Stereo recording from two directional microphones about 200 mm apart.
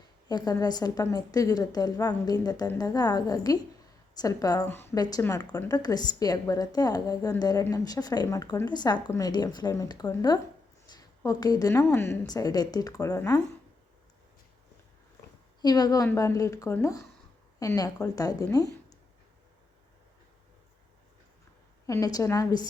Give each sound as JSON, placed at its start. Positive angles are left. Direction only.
{"t": 0.3, "sound": "a woman's voice", "side_deg": 20}
{"t": 15.6, "sound": "a woman's voice", "side_deg": 20}
{"t": 18.5, "sound": "a sound", "side_deg": 20}
{"t": 21.8, "sound": "a woman's voice", "side_deg": 15}